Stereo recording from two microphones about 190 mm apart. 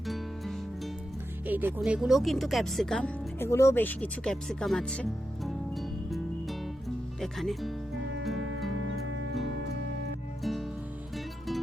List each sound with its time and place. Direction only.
0.1 s music: centre (ahead or behind)
1.5 s speech: 10° right (ahead or behind)
8.4 s music: 90° right
10.4 s music: centre (ahead or behind)